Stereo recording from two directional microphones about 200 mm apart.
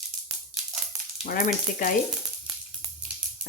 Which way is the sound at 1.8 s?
45° left (ahead or behind).